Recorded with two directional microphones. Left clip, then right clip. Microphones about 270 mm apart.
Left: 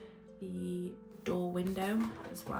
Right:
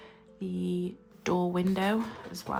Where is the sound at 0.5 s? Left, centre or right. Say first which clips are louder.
Right 7 dB; right.